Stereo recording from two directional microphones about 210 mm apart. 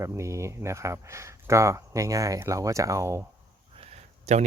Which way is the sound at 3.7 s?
30° right (ahead or behind).